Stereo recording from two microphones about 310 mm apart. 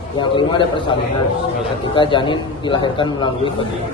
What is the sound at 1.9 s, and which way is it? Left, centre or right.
A man's voice, centre.